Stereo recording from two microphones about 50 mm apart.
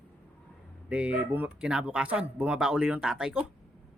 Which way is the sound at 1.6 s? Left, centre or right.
Centre.